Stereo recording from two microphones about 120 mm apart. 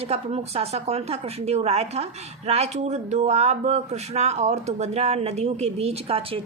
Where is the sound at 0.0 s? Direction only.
60° right (ahead or behind).